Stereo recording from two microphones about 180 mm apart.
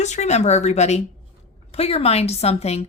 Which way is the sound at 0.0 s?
40° left (ahead or behind).